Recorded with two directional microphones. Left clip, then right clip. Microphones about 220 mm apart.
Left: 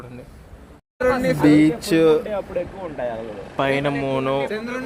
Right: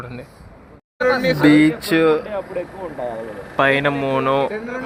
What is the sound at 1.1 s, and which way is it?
Speech, 40° left (ahead or behind).